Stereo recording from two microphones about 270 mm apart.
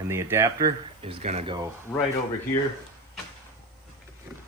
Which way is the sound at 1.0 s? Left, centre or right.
Right.